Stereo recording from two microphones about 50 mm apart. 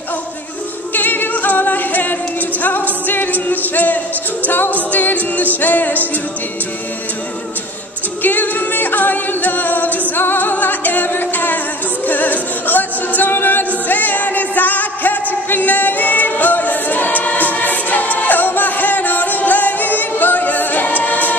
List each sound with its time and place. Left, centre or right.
0.9 s a capella: left
3.1 s music: left
8.2 s music: left
12.1 s a capella: left